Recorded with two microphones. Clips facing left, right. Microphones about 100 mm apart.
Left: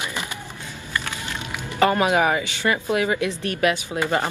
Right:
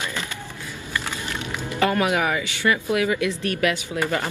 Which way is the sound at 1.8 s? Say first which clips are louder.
Left 3 dB; 30° left (ahead or behind).